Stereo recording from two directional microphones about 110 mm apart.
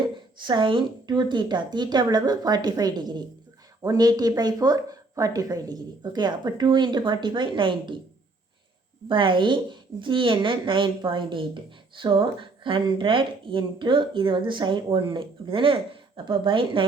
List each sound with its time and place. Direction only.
0.4 s speech: 45° right (ahead or behind)
9.0 s speech: 45° right (ahead or behind)